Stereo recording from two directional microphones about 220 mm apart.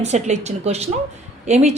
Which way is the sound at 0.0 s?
30° right (ahead or behind).